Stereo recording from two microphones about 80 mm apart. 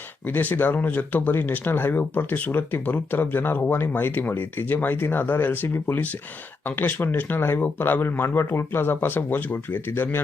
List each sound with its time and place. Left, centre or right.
0.3 s speech: left